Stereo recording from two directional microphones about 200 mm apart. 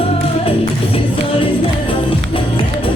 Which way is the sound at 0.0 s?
30° left (ahead or behind).